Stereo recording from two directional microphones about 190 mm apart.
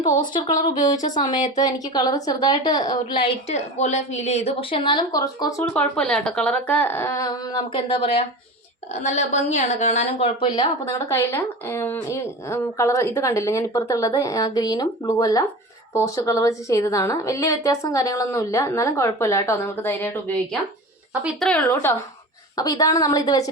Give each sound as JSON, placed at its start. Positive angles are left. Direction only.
{"t": 0.0, "sound": "a woman's voice", "side_deg": 20}
{"t": 21.1, "sound": "a woman's voice", "side_deg": 0}